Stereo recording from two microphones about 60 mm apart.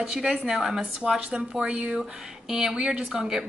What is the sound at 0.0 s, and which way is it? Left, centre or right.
A woman's voice, centre.